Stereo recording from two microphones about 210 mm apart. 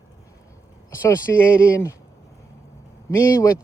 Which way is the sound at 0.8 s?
10° left (ahead or behind).